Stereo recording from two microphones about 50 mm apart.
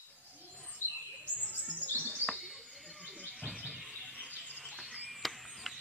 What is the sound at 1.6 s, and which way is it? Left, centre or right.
Chirp, centre.